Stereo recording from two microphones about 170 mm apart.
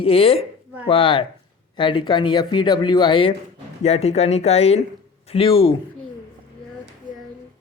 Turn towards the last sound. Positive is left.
turn(degrees=30)  # may be behind; listen again after turning